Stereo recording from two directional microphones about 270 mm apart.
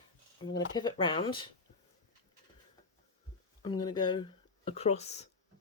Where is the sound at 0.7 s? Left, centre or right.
Centre.